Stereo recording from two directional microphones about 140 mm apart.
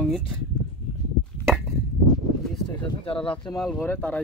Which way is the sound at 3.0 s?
40° left (ahead or behind).